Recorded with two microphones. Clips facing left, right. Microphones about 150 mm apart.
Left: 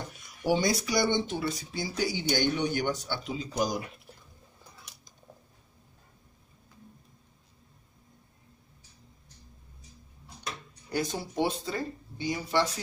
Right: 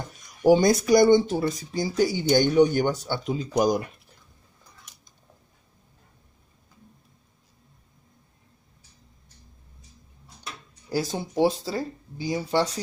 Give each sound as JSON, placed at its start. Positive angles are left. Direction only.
{"t": 0.4, "sound": "speech", "side_deg": -45}
{"t": 11.1, "sound": "speech", "side_deg": -30}